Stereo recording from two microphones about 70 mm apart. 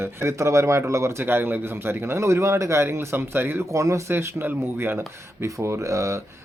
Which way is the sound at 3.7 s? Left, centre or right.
Right.